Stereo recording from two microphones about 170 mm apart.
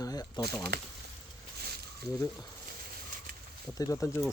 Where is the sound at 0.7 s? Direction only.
70° right (ahead or behind).